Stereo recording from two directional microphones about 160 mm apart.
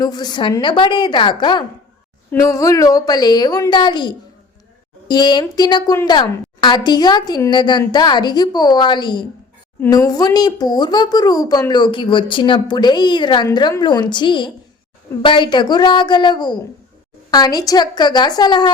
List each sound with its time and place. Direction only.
0.0 s speech: 25° left (ahead or behind)